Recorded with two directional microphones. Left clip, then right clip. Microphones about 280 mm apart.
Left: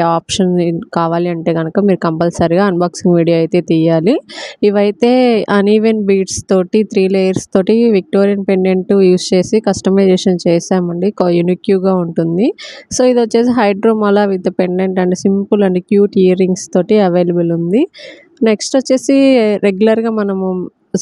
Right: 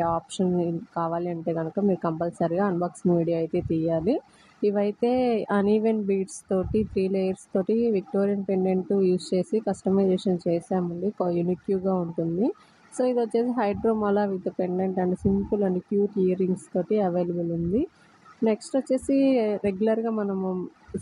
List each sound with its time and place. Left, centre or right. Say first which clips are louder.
0.0 s speech: left 13 dB; left
18.4 s speech: left 13 dB; left